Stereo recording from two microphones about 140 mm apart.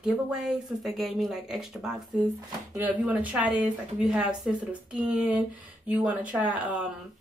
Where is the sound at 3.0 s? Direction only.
10° right (ahead or behind).